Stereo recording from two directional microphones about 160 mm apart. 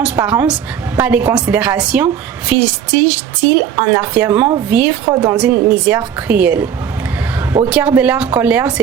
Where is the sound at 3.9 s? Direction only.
10° right (ahead or behind).